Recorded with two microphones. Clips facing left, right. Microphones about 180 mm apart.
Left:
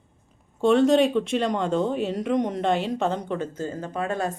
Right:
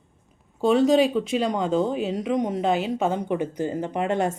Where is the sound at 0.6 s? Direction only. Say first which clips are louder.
Even; centre (ahead or behind).